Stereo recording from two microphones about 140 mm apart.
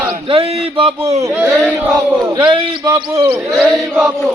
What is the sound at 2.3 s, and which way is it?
Speech, 30° right (ahead or behind).